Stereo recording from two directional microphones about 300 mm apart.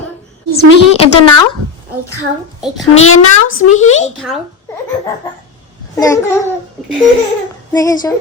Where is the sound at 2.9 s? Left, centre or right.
Left.